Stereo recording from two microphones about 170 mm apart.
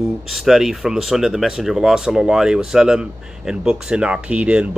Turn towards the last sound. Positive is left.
turn(degrees=-5)  # may be behind; listen again after turning